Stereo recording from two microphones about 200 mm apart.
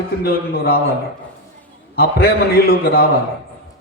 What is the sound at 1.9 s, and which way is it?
A man's voice, 50° left (ahead or behind).